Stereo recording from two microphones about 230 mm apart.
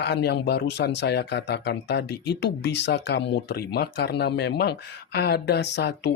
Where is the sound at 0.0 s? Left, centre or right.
Left.